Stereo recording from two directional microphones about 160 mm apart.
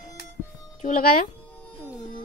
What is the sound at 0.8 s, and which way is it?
Speech, 60° left (ahead or behind).